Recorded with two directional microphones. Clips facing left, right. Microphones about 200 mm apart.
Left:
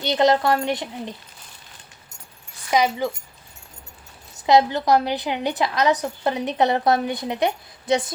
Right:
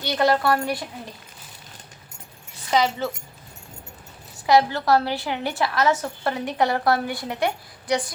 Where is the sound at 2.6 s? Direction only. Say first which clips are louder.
Left 1 dB; 15° left (ahead or behind).